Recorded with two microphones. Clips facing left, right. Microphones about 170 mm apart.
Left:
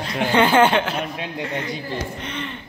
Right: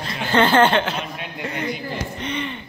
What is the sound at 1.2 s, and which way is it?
Speech, 30° left (ahead or behind).